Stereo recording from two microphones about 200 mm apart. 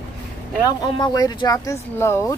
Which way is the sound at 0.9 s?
20° left (ahead or behind).